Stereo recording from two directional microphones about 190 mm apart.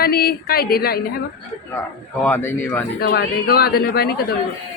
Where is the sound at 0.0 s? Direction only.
55° left (ahead or behind).